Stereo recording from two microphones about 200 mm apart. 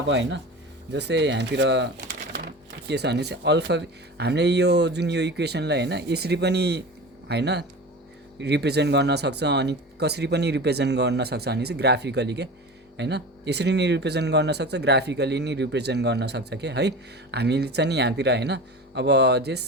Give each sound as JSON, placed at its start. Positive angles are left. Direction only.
{"t": 0.1, "sound": "speech", "side_deg": -60}